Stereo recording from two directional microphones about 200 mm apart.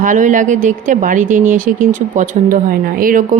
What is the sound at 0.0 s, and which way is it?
Speech, 40° right (ahead or behind).